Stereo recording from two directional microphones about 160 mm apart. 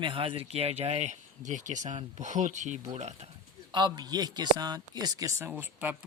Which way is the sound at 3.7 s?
25° right (ahead or behind).